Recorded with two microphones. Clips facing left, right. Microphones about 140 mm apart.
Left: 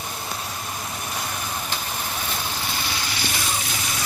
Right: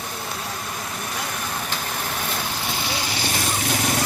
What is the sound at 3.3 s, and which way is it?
Vehicle, 50° right (ahead or behind).